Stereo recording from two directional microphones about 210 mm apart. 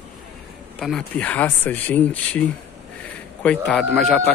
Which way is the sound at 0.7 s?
Centre (ahead or behind).